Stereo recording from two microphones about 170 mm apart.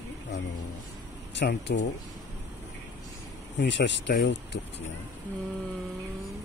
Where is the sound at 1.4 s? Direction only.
90° left.